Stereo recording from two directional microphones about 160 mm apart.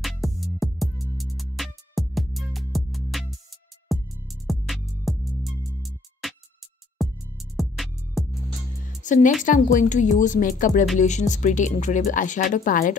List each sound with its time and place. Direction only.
0.0 s music: centre (ahead or behind)
9.0 s speech: 50° left (ahead or behind)